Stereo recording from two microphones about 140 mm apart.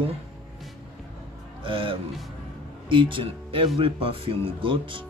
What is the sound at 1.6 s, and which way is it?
A man's voice, 40° right (ahead or behind).